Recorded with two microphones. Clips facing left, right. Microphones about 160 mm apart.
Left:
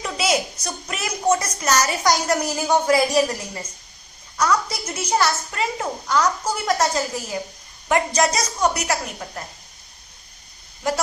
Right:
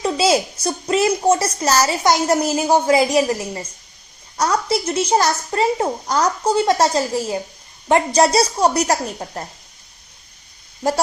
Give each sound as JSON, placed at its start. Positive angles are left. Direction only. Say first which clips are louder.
{"t": 0.0, "sound": "a child's voice", "louder": "right 6 dB", "side_deg": -30}
{"t": 4.4, "sound": "a child's voice", "louder": "right 3 dB", "side_deg": -35}